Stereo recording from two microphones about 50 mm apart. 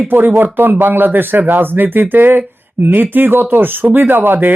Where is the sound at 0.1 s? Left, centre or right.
Right.